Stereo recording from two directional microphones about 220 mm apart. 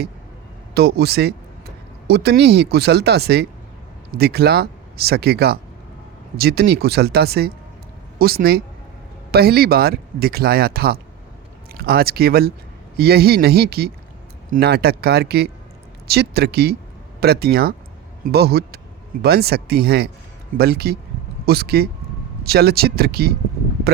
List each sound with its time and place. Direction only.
0.7 s speech: 45° right (ahead or behind)